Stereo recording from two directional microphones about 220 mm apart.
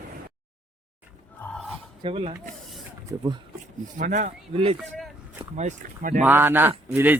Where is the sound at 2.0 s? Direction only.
25° right (ahead or behind).